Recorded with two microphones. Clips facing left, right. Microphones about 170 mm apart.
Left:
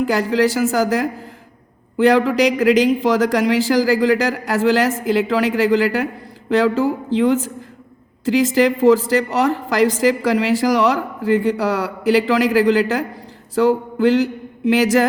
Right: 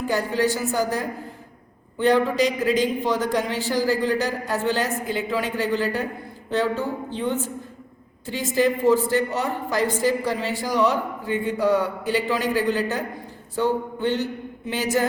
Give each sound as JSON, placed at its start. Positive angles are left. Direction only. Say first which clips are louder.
{"t": 0.0, "sound": "a woman's voice", "louder": "left 6 dB", "side_deg": 90}